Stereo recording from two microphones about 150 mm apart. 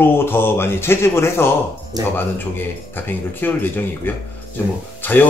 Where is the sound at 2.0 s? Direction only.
25° right (ahead or behind).